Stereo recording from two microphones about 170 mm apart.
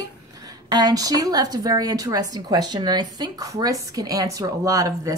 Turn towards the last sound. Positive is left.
turn(degrees=-20)  # may be behind; listen again after turning